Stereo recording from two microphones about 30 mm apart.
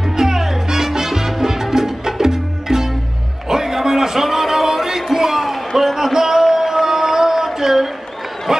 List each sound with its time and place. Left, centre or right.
0.2 s salsa music: centre
3.4 s music: centre
5.1 s a sound: centre